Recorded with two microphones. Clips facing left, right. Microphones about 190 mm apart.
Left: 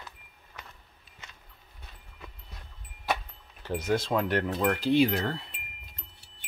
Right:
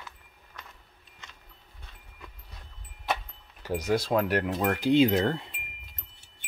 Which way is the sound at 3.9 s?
10° right (ahead or behind).